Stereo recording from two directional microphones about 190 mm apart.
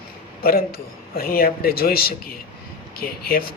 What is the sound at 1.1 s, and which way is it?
Speech, 50° left (ahead or behind).